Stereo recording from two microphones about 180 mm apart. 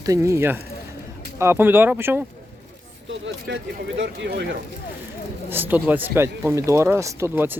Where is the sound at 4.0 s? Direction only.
70° right (ahead or behind).